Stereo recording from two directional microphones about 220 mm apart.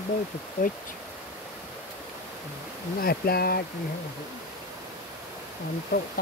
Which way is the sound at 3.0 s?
45° left (ahead or behind).